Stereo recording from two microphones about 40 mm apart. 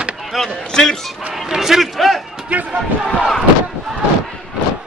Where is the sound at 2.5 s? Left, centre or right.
Right.